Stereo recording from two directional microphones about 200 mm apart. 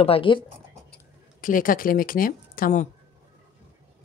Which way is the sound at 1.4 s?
45° left (ahead or behind).